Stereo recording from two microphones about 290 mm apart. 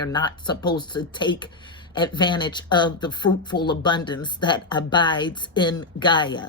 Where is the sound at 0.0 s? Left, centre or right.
Centre.